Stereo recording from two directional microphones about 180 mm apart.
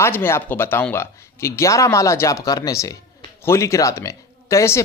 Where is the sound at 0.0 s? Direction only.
10° left (ahead or behind).